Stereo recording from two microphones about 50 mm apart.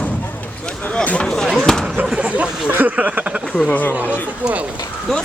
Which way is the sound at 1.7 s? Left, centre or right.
Centre.